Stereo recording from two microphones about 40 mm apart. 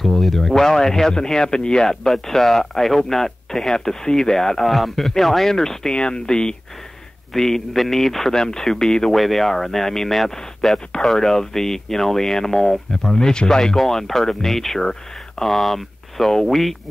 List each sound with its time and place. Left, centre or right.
0.0 s speech: centre
7.3 s speech: centre
8.3 s speech: centre
9.1 s speech: centre